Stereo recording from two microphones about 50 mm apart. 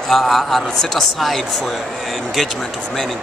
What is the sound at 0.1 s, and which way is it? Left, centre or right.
Speech, centre.